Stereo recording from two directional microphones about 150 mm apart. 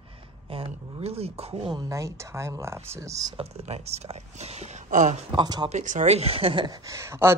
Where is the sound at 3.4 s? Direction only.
45° right (ahead or behind).